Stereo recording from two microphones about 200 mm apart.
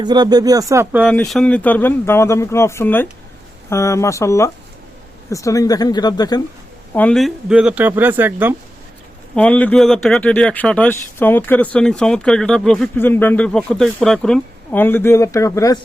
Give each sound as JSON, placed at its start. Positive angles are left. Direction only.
{"t": 0.0, "sound": "speech", "side_deg": -20}
{"t": 1.0, "sound": "speech", "side_deg": 5}
{"t": 6.9, "sound": "speech", "side_deg": 5}
{"t": 9.3, "sound": "speech", "side_deg": 5}